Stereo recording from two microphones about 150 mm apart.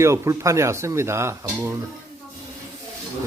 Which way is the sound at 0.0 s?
20° right (ahead or behind).